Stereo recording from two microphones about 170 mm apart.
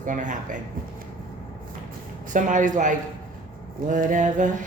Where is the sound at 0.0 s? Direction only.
50° right (ahead or behind).